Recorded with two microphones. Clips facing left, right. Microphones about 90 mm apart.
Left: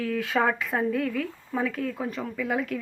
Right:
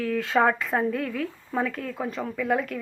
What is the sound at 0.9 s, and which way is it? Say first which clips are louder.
Speech: left 1 dB; 5° right (ahead or behind).